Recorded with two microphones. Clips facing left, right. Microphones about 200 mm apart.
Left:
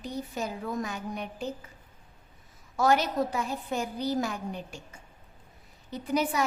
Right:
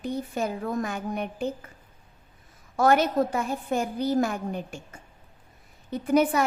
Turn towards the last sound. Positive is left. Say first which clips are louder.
# right 6 dB
turn(degrees=-55)  # may be behind; listen again after turning